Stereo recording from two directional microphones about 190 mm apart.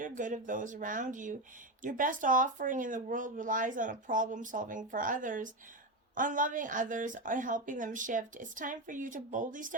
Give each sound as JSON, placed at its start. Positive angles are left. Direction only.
{"t": 0.0, "sound": "speech", "side_deg": -45}